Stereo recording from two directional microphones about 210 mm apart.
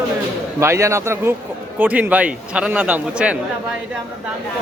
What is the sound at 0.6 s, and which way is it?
Speech, 15° right (ahead or behind).